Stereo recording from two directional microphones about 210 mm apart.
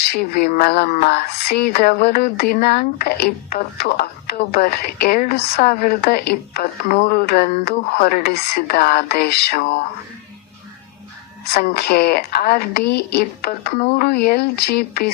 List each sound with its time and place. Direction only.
0.0 s speech: 50° left (ahead or behind)
11.5 s speech: 50° left (ahead or behind)